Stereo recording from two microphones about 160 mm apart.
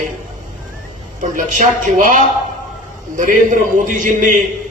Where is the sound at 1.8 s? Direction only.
55° right (ahead or behind).